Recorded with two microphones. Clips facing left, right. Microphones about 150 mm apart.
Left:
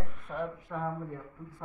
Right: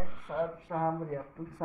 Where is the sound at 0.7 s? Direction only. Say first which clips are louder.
Right 5 dB; 50° right (ahead or behind).